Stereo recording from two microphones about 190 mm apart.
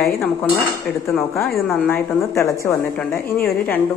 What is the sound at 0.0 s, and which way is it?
Dishes, centre (ahead or behind).